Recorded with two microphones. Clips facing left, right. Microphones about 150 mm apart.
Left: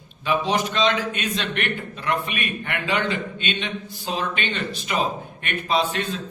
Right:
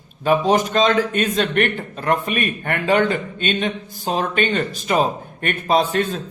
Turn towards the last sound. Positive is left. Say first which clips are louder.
# right 5 dB
turn(degrees=-45)  # may be behind; listen again after turning